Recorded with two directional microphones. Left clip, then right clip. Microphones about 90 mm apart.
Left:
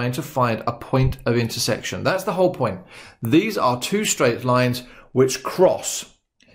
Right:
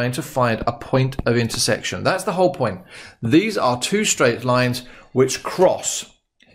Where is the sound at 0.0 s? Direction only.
30° right (ahead or behind).